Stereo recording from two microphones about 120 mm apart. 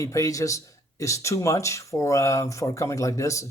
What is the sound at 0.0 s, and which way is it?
Speech, 25° left (ahead or behind).